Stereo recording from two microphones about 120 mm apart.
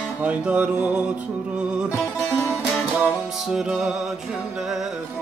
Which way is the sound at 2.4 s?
15° left (ahead or behind).